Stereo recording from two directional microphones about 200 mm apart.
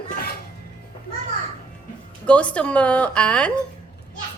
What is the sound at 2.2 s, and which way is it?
A woman's voice, 5° left (ahead or behind).